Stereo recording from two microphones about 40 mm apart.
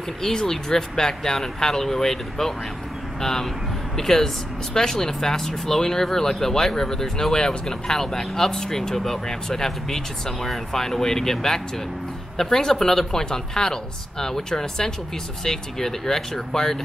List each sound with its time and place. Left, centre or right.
0.2 s speech: centre